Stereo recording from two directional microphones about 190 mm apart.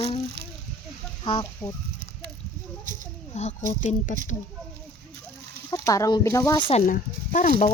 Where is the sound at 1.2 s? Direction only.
25° left (ahead or behind).